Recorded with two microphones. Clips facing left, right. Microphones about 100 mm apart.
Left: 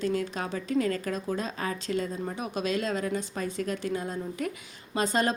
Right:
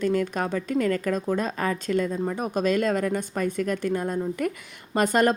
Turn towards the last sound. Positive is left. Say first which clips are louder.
# right 6 dB
turn(degrees=-55)  # may be behind; listen again after turning